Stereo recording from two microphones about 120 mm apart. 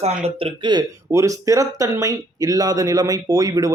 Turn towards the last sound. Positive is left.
turn(degrees=-30)  # may be behind; listen again after turning